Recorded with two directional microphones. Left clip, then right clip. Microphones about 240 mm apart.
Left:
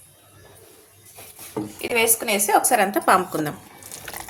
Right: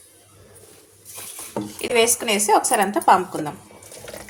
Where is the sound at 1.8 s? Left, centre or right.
Centre.